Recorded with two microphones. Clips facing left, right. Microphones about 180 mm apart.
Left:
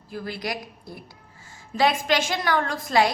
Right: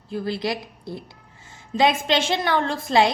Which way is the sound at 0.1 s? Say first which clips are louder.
Right 5 dB; 25° right (ahead or behind).